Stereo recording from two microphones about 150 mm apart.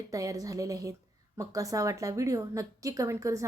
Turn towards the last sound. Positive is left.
turn(degrees=-20)  # may be behind; listen again after turning